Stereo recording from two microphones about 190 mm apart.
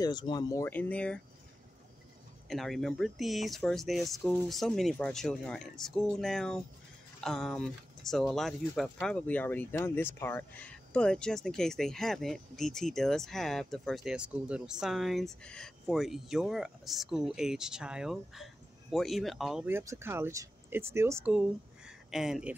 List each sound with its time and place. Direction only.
0.0 s speech: 25° left (ahead or behind); by 1.2 s 5° left (ahead or behind)
2.4 s speech: centre (ahead or behind)